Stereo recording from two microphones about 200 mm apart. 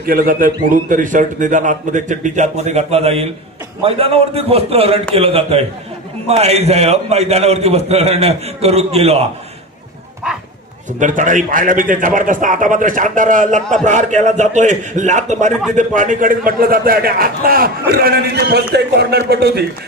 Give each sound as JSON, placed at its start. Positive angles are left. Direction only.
{"t": 0.0, "sound": "a man's voice", "side_deg": -45}
{"t": 10.9, "sound": "a man's voice", "side_deg": -40}